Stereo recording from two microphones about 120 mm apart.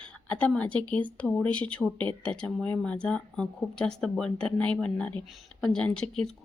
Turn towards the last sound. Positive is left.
turn(degrees=10)  # may be behind; listen again after turning